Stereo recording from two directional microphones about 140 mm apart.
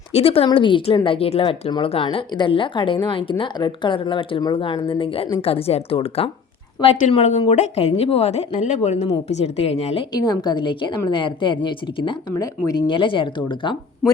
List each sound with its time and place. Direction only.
0.1 s a woman's voice: 45° left (ahead or behind)
10.2 s a woman's voice: 30° left (ahead or behind)